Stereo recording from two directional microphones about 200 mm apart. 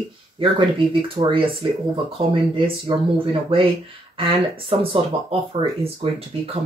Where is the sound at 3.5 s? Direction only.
30° right (ahead or behind).